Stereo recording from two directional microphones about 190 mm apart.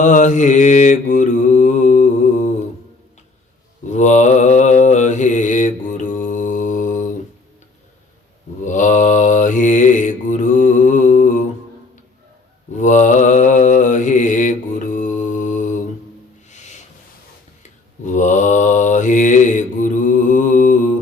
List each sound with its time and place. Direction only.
0.0 s mantra: 40° left (ahead or behind)
3.8 s mantra: 40° left (ahead or behind)
8.6 s mantra: 40° left (ahead or behind)
12.7 s mantra: 40° left (ahead or behind)
16.5 s music: 40° left (ahead or behind)
17.6 s mantra: 40° left (ahead or behind)